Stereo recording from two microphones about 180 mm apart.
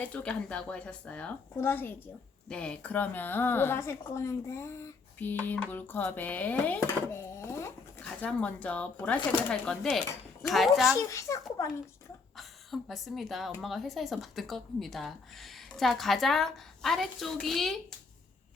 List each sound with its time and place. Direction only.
0.0 s a woman's voice: 5° left (ahead or behind)
10.9 s a woman's voice: 15° left (ahead or behind)
12.4 s a woman's voice: centre (ahead or behind)